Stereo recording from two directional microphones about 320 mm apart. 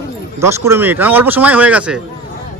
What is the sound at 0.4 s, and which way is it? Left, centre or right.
Speech, centre.